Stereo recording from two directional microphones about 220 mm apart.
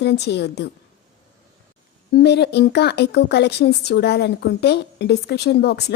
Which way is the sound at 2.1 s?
50° left (ahead or behind).